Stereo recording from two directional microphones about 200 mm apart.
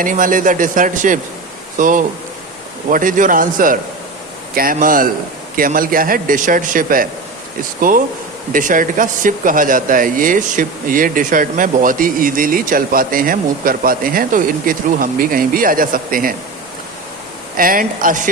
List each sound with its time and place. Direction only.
0.0 s speech: 40° right (ahead or behind)
17.6 s speech: 45° right (ahead or behind)